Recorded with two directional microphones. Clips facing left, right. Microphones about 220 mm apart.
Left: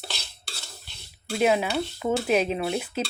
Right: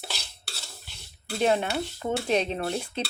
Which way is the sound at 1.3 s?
5° left (ahead or behind).